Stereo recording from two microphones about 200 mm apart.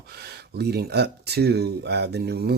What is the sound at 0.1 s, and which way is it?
Speech, 55° right (ahead or behind).